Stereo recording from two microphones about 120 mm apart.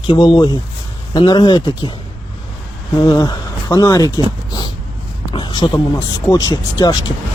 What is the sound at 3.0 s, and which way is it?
Speech, 35° left (ahead or behind).